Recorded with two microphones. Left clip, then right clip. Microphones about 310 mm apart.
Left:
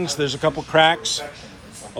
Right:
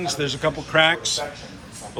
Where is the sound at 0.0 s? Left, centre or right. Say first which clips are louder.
Left 2 dB; centre.